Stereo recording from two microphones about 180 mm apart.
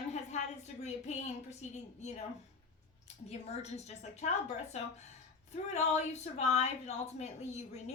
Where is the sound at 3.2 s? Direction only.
35° left (ahead or behind).